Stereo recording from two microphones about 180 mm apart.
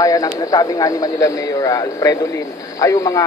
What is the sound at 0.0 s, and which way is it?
A man's voice, 20° left (ahead or behind).